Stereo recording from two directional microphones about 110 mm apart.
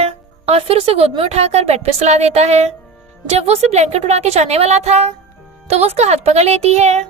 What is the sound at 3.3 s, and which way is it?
Speech, 70° right (ahead or behind).